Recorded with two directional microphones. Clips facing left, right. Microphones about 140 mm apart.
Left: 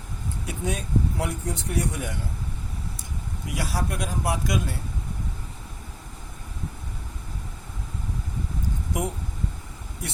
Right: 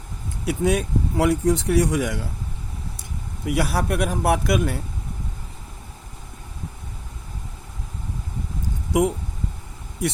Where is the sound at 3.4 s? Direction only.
65° right (ahead or behind).